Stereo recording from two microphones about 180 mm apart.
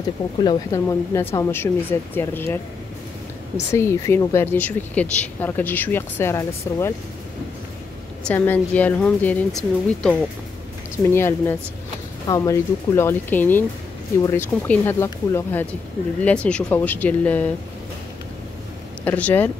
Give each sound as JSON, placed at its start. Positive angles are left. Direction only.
{"t": 0.4, "sound": "speech", "side_deg": 20}
{"t": 3.7, "sound": "speech", "side_deg": 15}
{"t": 8.2, "sound": "speech", "side_deg": 10}
{"t": 11.1, "sound": "speech", "side_deg": 15}
{"t": 19.0, "sound": "speech", "side_deg": 10}